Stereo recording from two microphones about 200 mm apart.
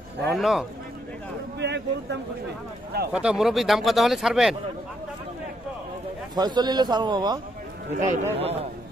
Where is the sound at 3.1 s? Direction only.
5° right (ahead or behind).